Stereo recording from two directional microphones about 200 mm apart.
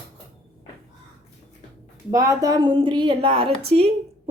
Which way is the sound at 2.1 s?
15° right (ahead or behind).